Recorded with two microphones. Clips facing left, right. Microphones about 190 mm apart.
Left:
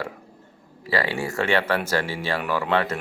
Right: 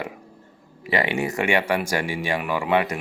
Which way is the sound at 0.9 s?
20° right (ahead or behind).